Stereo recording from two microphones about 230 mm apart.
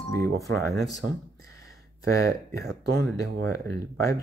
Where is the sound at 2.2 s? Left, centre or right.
Right.